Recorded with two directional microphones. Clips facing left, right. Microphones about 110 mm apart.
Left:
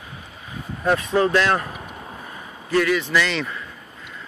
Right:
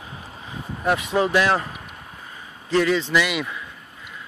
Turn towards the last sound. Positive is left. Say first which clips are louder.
# even
turn(degrees=-10)  # may be behind; listen again after turning